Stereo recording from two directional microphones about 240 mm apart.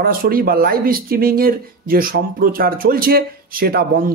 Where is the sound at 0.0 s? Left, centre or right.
Right.